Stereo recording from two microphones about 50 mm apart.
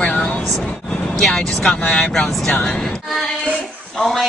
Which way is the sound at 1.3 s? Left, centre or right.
Centre.